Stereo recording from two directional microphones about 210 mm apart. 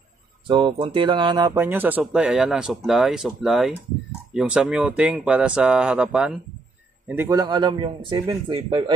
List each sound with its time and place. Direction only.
0.5 s a man's voice: 20° right (ahead or behind)